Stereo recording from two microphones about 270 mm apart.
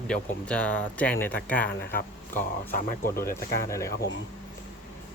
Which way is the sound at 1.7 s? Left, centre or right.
Left.